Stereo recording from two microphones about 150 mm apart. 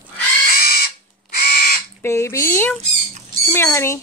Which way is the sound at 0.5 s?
90° left.